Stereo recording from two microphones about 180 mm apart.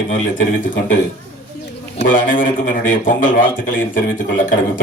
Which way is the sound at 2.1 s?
50° left (ahead or behind).